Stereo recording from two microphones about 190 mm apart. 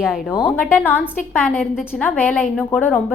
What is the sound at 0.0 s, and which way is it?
Speech, 5° right (ahead or behind).